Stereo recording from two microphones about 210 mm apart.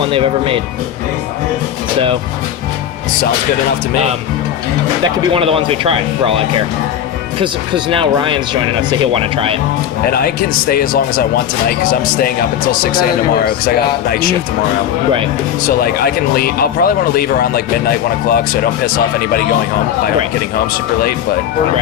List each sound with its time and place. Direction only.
0.0 s speech: 25° right (ahead or behind)
5.3 s speech: 25° right (ahead or behind)
7.4 s speech: 25° right (ahead or behind)
10.1 s speech: 45° left (ahead or behind)
14.1 s speech: 45° left (ahead or behind)
15.6 s speech: 45° left (ahead or behind)